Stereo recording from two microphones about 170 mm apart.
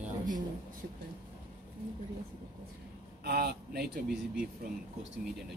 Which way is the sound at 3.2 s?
65° right (ahead or behind).